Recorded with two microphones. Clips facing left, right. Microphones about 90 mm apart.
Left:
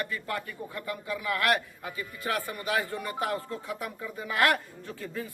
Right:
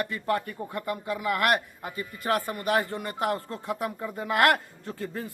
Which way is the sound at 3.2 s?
50° right (ahead or behind).